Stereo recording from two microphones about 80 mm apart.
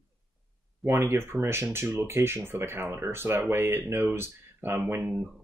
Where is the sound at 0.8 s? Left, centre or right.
Right.